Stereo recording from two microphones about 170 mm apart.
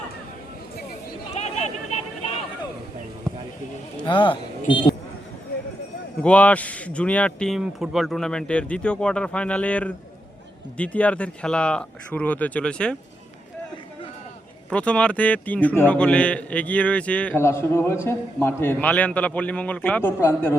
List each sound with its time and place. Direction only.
1.3 s a sound: 40° left (ahead or behind)
4.0 s speech: 30° left (ahead or behind)
6.2 s a man's voice: 10° left (ahead or behind)
14.7 s a man's voice: 5° left (ahead or behind)